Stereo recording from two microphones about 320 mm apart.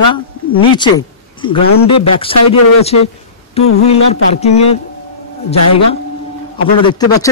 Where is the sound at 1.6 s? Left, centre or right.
Left.